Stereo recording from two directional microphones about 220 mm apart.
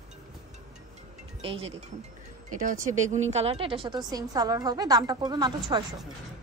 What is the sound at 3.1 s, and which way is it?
A woman's voice, 30° right (ahead or behind).